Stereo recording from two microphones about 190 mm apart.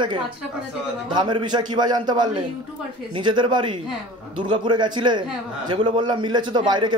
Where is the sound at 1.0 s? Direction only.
25° right (ahead or behind).